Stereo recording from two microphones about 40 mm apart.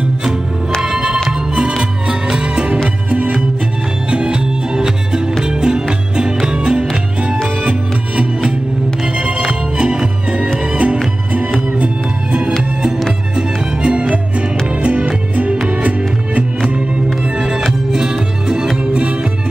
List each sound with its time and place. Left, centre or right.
0.8 s music: centre
2.3 s music: right
4.1 s music: right
8.2 s music: right
17.4 s music: centre